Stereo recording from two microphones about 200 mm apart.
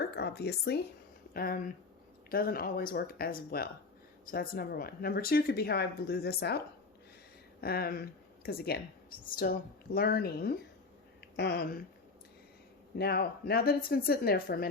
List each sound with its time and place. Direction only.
0.0 s a woman's voice: 55° left (ahead or behind)
7.6 s a woman's voice: 50° left (ahead or behind)
13.0 s a woman's voice: 50° left (ahead or behind)